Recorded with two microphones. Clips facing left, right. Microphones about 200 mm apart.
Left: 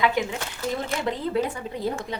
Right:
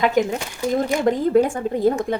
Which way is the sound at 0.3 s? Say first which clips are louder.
Right 7 dB; 15° right (ahead or behind).